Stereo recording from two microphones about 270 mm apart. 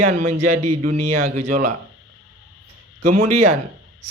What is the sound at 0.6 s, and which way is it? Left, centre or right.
Speech, right.